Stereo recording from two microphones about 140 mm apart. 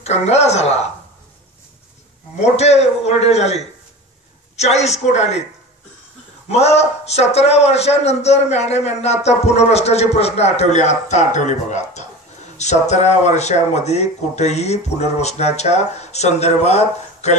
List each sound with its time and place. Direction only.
0.0 s a man's voice: 50° left (ahead or behind)
2.4 s a man's voice: 50° left (ahead or behind)
6.5 s a man's voice: 50° left (ahead or behind)